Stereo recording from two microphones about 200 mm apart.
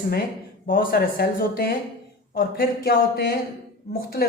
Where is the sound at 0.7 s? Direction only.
45° left (ahead or behind).